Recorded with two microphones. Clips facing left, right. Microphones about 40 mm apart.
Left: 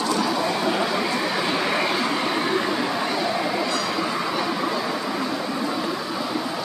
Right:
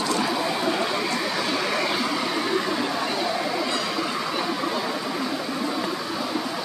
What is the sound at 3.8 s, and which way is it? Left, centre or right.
Vehicle, centre.